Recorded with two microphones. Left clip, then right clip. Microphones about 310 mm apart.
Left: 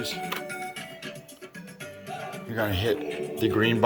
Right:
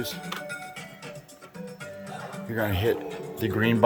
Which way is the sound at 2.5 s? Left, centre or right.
Centre.